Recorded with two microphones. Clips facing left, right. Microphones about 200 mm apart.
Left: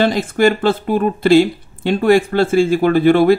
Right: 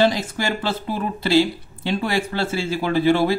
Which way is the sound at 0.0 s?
55° left (ahead or behind).